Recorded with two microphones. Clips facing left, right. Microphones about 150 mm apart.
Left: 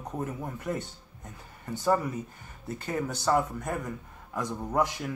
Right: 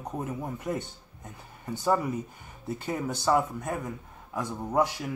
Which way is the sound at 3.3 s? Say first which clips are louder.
Even; 5° right (ahead or behind).